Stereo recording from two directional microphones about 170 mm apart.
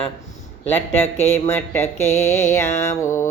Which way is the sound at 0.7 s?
15° left (ahead or behind).